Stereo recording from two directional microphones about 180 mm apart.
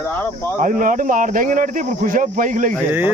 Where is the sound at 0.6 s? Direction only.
45° right (ahead or behind).